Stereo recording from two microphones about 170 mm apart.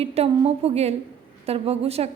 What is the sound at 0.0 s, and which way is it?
A woman's voice, 35° right (ahead or behind).